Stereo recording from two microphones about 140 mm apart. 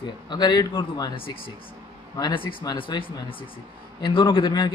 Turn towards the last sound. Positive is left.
turn(degrees=30)  # may be behind; listen again after turning